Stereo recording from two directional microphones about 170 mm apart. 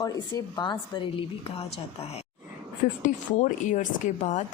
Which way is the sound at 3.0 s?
45° left (ahead or behind).